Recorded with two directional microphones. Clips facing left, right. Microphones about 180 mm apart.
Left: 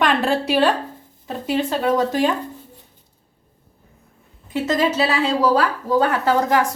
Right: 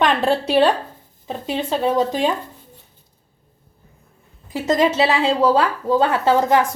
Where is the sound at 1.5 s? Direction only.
20° right (ahead or behind).